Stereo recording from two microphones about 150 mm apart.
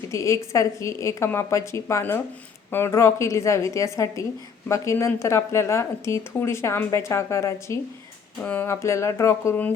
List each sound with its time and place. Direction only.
0.1 s speech: 20° left (ahead or behind)